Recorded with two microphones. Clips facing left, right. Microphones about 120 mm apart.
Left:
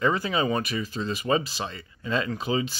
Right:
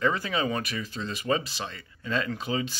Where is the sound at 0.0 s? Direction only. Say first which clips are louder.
Left 2 dB; 5° left (ahead or behind).